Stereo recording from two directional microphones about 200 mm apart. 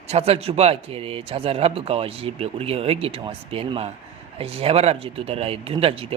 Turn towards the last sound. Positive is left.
turn(degrees=-30)  # may be behind; listen again after turning